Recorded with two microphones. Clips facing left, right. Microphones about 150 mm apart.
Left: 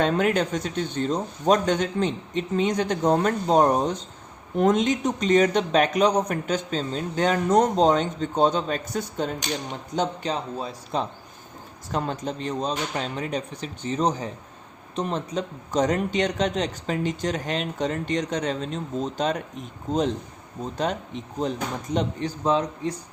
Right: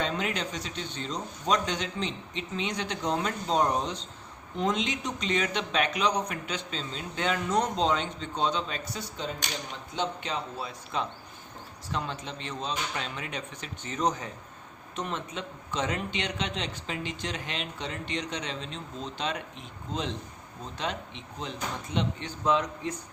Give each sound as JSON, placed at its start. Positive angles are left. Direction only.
{"t": 0.0, "sound": "a man's voice", "side_deg": 50}